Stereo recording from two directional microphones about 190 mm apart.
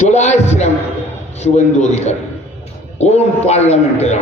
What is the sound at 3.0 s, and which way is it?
A man's voice, 35° left (ahead or behind).